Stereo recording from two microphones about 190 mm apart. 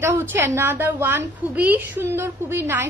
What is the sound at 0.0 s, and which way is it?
A woman's voice, 10° right (ahead or behind).